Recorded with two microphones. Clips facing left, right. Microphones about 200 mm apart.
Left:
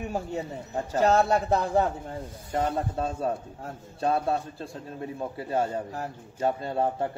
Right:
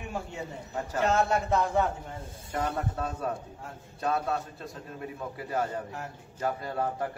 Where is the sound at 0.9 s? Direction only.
35° left (ahead or behind).